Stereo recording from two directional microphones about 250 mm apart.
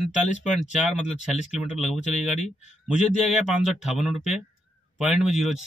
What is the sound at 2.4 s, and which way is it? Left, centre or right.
Speech, left.